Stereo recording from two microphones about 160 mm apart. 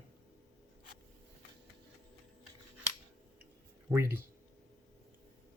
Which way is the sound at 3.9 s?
15° right (ahead or behind).